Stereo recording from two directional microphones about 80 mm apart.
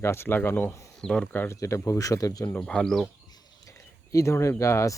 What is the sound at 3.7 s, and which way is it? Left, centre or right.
Speech, left.